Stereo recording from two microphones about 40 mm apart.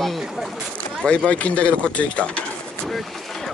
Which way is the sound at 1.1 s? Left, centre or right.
Left.